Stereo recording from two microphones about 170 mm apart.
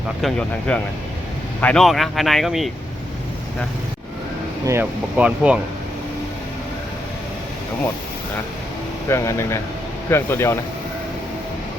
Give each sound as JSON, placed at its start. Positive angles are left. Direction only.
{"t": 0.2, "sound": "speech", "side_deg": 5}
{"t": 4.6, "sound": "speech", "side_deg": -15}
{"t": 9.0, "sound": "speech", "side_deg": 15}